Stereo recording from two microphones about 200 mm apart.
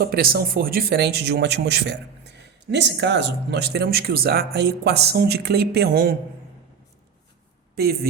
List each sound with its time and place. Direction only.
0.0 s speech: 50° right (ahead or behind)
7.8 s a woman's voice: 50° right (ahead or behind)